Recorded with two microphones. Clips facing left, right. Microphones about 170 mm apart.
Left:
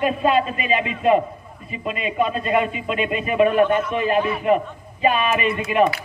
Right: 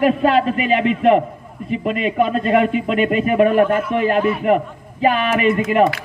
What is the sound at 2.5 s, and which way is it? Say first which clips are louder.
A man's voice: right 6 dB; 60° right (ahead or behind).